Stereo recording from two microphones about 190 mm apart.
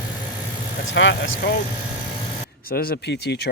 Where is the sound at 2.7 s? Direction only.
55° left (ahead or behind).